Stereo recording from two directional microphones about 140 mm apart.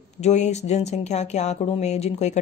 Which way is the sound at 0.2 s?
55° left (ahead or behind).